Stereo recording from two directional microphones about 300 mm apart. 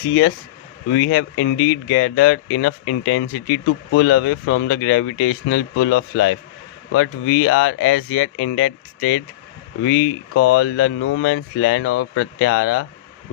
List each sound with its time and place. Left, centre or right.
0.1 s speech: left